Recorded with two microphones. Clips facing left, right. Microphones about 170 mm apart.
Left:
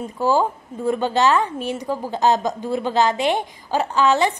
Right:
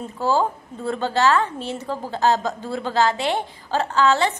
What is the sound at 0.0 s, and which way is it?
A woman's voice, 15° left (ahead or behind).